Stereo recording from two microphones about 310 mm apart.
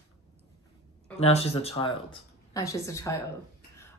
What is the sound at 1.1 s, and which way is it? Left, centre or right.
Speech, centre.